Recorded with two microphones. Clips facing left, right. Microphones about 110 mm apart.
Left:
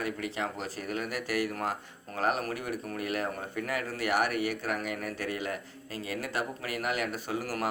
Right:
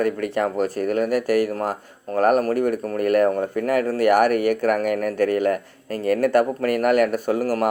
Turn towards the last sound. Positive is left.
turn(degrees=-45)  # may be behind; listen again after turning